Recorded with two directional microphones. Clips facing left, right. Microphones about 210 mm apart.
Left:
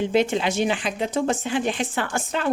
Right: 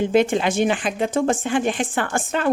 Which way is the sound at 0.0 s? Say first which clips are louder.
Right 3 dB; 50° right (ahead or behind).